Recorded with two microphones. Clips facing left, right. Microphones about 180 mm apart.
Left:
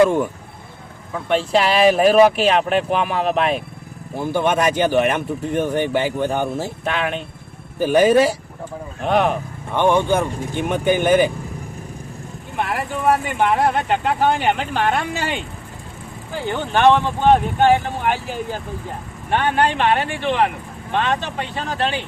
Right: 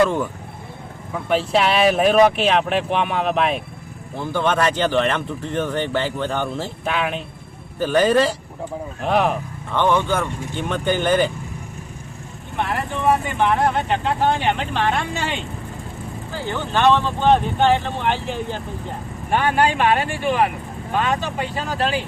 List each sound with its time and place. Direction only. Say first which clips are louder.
0.0 s speech: left 3 dB; 15° left (ahead or behind)
1.1 s speech: left 1 dB; centre (ahead or behind)
4.2 s speech: left 2 dB; 15° left (ahead or behind)
6.8 s speech: even; centre (ahead or behind)
7.8 s speech: left 3 dB; 10° left (ahead or behind)
9.7 s speech: left 2 dB; 15° left (ahead or behind)
12.5 s speech: even; 5° left (ahead or behind)
16.3 s speech: left 3 dB; 15° left (ahead or behind)
19.3 s speech: even; 5° right (ahead or behind)